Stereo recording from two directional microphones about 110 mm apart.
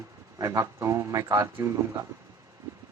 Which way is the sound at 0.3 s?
30° right (ahead or behind).